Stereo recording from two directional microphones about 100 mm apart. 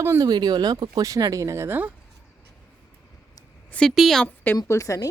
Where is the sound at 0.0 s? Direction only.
25° right (ahead or behind).